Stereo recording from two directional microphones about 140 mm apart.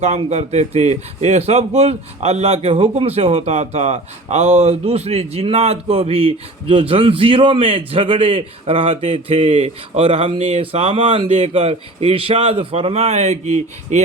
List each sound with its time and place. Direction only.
0.0 s a man's voice: 50° right (ahead or behind)